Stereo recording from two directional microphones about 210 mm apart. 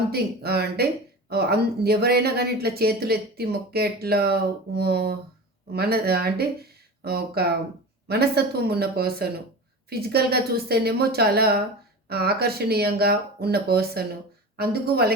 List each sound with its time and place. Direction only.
0.1 s speech: 50° right (ahead or behind)